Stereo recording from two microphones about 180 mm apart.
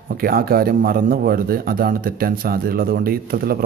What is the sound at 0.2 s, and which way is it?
Speech, 55° right (ahead or behind).